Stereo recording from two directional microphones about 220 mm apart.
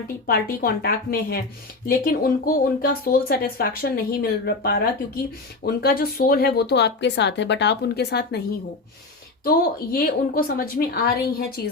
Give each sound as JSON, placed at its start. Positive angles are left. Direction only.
{"t": 0.3, "sound": "speech", "side_deg": 45}
{"t": 9.4, "sound": "speech", "side_deg": 40}